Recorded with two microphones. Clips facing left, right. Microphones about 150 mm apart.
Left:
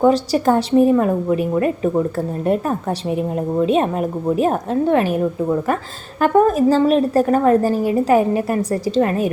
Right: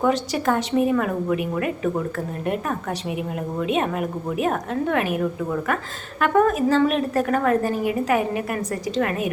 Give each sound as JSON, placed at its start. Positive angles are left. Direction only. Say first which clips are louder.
{"t": 0.0, "sound": "a woman's voice", "louder": "left 6 dB", "side_deg": 35}